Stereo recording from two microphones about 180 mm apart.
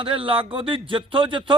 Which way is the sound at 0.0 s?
30° right (ahead or behind).